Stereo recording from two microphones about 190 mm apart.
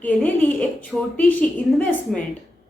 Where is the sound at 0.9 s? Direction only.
5° right (ahead or behind).